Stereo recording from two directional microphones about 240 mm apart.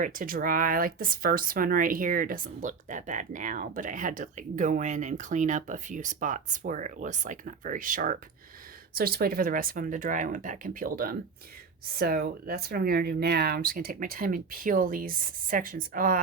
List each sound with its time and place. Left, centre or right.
0.0 s speech: right